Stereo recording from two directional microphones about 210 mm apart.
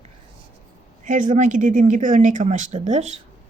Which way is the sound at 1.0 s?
40° right (ahead or behind).